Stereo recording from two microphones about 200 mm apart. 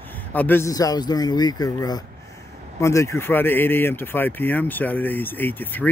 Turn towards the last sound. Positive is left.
turn(degrees=10)  # may be behind; listen again after turning